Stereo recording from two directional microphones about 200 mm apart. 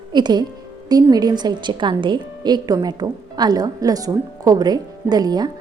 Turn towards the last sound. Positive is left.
turn(degrees=-20)  # may be behind; listen again after turning